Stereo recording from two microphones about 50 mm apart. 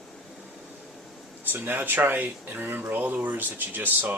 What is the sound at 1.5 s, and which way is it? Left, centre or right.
Speech, right.